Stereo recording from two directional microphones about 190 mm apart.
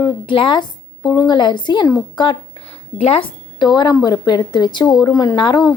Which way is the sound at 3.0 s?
30° left (ahead or behind).